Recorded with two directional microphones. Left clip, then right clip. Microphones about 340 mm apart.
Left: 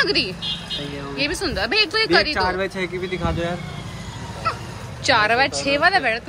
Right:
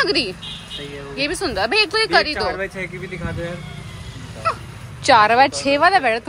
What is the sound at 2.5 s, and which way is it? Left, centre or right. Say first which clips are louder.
Speech: left 2 dB; left.